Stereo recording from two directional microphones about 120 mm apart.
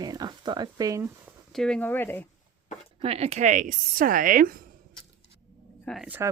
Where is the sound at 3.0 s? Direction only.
60° right (ahead or behind); by 3.8 s 90° right.